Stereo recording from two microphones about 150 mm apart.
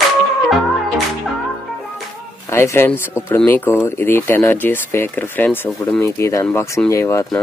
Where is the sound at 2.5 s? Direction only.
15° left (ahead or behind).